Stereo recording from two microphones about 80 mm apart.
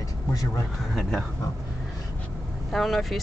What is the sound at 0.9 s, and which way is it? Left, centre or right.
Speech, centre.